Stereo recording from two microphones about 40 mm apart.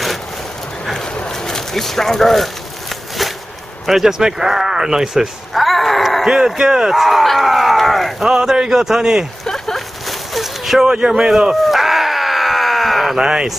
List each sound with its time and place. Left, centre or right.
1.1 s a sound: centre
3.8 s speech: centre
6.2 s speech: centre
8.3 s a man's voice: centre
9.4 s a sound: centre
10.9 s groan: centre
13.2 s speech: centre